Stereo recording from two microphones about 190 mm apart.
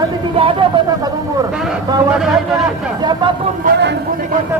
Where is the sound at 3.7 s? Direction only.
45° right (ahead or behind).